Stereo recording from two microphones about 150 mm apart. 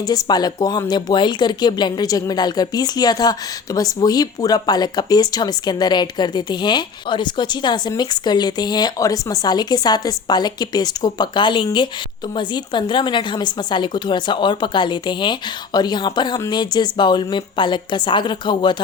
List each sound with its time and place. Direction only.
0.0 s a woman's voice: 25° left (ahead or behind)